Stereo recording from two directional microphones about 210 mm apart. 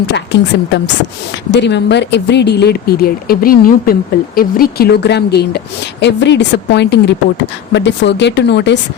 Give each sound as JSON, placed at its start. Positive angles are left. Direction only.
{"t": 0.1, "sound": "a woman's voice", "side_deg": 55}